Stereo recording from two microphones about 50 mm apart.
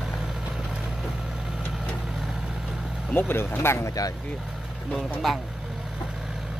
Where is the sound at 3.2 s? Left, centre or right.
Left.